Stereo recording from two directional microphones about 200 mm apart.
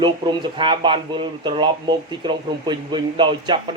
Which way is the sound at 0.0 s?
20° right (ahead or behind).